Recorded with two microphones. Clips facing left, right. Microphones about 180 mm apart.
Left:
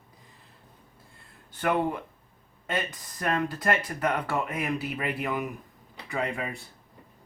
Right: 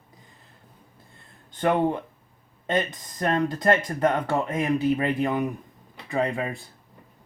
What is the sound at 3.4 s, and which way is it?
Speech, 20° right (ahead or behind).